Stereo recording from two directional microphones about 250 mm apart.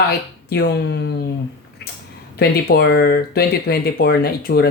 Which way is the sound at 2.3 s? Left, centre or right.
Left.